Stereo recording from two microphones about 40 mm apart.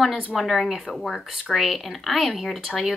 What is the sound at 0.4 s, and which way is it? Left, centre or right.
Speech, centre.